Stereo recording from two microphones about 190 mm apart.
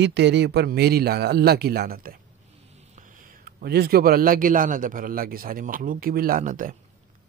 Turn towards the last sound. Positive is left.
turn(degrees=-45)  # may be behind; listen again after turning